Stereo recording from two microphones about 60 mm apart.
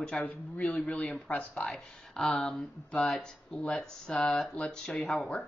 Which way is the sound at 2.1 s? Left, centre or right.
Centre.